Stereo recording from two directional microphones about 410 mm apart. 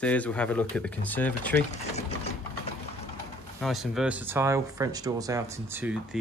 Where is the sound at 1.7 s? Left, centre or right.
Centre.